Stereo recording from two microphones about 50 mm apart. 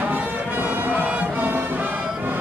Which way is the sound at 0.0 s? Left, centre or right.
Right.